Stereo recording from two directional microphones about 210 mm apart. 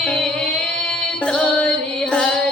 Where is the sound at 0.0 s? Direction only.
5° left (ahead or behind).